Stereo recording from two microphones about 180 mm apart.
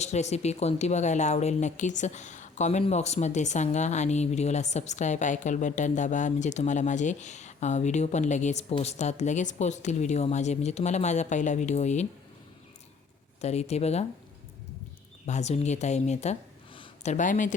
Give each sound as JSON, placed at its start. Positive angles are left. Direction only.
{"t": 0.0, "sound": "a woman's voice", "side_deg": 40}
{"t": 13.4, "sound": "a woman's voice", "side_deg": 35}
{"t": 15.3, "sound": "speech", "side_deg": 40}